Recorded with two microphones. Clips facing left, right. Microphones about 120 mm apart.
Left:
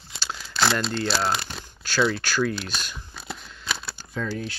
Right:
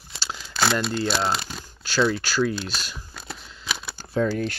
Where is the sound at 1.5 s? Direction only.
10° right (ahead or behind).